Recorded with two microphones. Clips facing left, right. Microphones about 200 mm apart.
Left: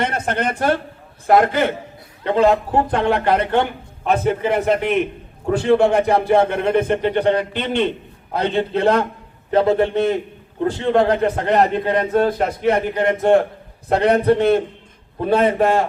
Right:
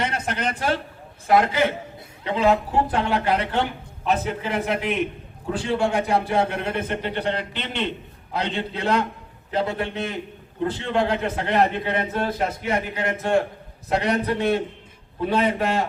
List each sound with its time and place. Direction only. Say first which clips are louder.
0.0 s a man's voice: left 5 dB; 55° left (ahead or behind)